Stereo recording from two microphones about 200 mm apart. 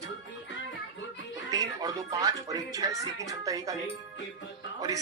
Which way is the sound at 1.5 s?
15° right (ahead or behind).